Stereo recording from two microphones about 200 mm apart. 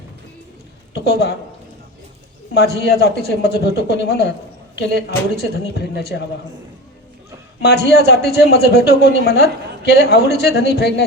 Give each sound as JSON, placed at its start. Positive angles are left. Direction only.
{"t": 0.9, "sound": "speech", "side_deg": 55}
{"t": 2.6, "sound": "speech", "side_deg": 55}
{"t": 7.6, "sound": "speech", "side_deg": 55}